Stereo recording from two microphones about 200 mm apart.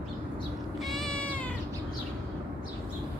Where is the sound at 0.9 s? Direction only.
Centre (ahead or behind).